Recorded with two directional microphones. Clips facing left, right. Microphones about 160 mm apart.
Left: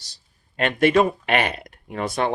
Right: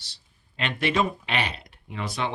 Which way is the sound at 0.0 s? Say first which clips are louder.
Even; 45° left (ahead or behind).